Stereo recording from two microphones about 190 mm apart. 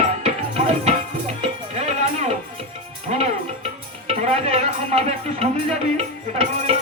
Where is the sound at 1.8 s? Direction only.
35° right (ahead or behind).